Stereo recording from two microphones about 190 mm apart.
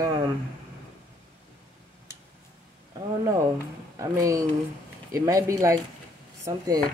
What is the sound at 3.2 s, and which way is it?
Speech, 15° right (ahead or behind).